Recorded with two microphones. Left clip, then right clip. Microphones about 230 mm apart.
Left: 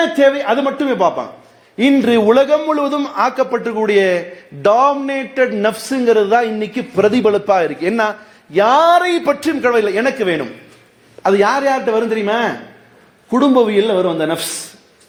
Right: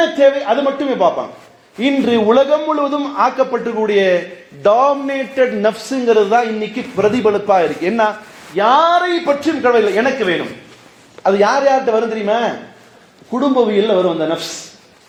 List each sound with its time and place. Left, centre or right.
0.2 s a man's voice: left